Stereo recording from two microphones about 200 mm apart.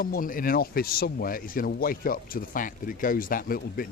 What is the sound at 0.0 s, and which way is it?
Speech, 45° left (ahead or behind).